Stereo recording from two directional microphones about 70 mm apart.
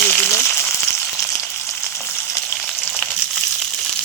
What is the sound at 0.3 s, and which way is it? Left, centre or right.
Frying, left.